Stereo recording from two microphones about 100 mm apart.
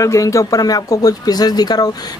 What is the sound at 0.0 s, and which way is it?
Speech, 30° left (ahead or behind).